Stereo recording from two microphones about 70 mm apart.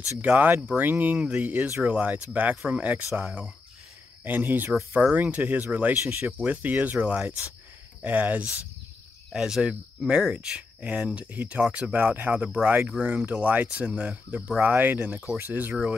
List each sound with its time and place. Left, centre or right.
0.2 s speech: right
4.2 s speech: right
9.3 s speech: centre